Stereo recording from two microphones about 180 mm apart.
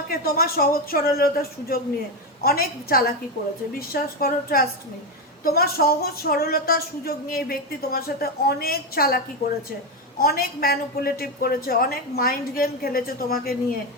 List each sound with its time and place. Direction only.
0.1 s a woman's voice: 55° left (ahead or behind)